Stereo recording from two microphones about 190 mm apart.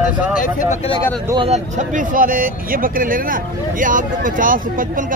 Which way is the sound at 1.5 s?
40° right (ahead or behind).